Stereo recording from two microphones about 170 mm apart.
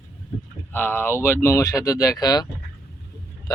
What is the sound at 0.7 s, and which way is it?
Speech, 10° left (ahead or behind).